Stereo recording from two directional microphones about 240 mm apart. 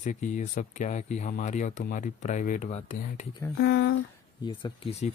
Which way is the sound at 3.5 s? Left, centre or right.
Left.